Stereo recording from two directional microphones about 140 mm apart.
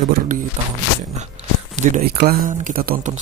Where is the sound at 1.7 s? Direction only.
60° right (ahead or behind); by 2.3 s 90° right.